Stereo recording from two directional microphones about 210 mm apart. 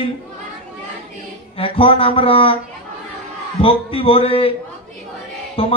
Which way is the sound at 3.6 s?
25° left (ahead or behind).